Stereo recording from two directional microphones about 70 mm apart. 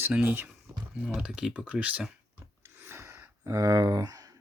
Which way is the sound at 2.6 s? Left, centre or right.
Right.